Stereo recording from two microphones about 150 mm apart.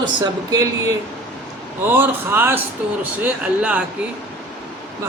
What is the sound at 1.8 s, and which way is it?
Speech, 15° right (ahead or behind).